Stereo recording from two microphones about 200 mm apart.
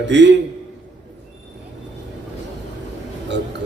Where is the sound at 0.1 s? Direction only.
60° right (ahead or behind).